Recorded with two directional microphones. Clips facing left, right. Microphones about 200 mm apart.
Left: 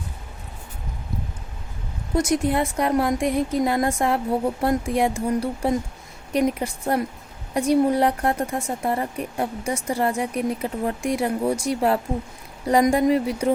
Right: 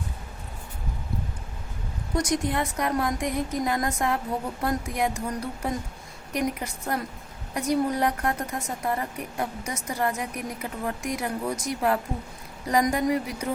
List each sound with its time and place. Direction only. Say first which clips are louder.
2.1 s a woman's voice: left 5 dB; 25° left (ahead or behind)